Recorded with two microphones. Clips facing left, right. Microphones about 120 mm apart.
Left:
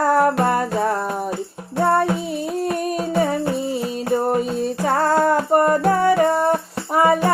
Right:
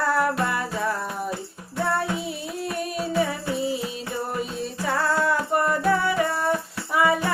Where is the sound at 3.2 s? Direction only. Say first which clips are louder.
Left 4 dB; 45° left (ahead or behind).